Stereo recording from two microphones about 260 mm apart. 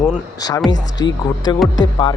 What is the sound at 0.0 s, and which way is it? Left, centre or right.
A man's voice, centre.